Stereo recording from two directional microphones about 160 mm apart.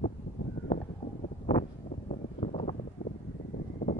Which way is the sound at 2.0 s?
45° left (ahead or behind).